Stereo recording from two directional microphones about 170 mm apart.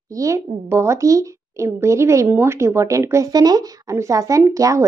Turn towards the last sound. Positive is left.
turn(degrees=-20)  # may be behind; listen again after turning